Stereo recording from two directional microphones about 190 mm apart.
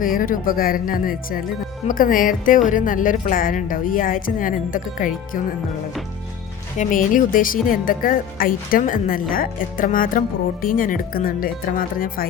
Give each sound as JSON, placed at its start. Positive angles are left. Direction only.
{"t": 0.0, "sound": "speech", "side_deg": 45}
{"t": 6.7, "sound": "speech", "side_deg": 45}